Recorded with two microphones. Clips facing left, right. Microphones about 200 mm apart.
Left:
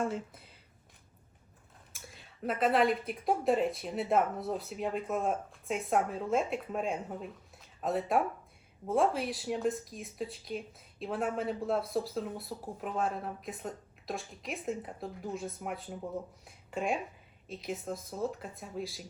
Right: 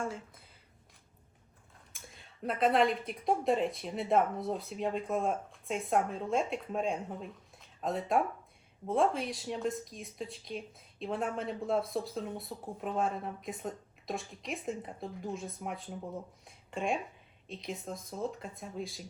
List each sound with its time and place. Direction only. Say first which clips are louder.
1.9 s speech: left 2 dB; centre (ahead or behind)